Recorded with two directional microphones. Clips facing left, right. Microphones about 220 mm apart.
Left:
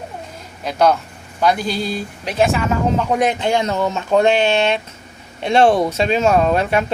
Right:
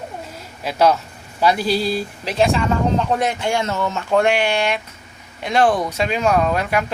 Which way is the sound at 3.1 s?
20° left (ahead or behind).